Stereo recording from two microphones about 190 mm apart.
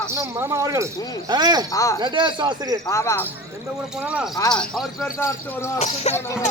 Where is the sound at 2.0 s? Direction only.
25° right (ahead or behind).